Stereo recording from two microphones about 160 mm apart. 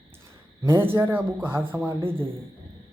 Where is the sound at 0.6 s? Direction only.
15° right (ahead or behind).